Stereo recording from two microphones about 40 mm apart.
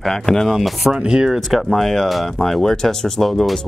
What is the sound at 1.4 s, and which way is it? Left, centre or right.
Speech, centre.